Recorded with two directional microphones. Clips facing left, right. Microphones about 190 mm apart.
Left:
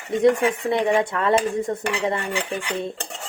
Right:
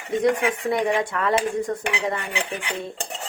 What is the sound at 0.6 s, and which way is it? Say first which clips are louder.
Dishes: left 1 dB; 25° left (ahead or behind).